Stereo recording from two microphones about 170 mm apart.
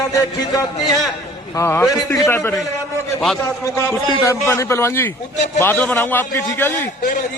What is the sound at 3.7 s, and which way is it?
A man's voice, 15° left (ahead or behind).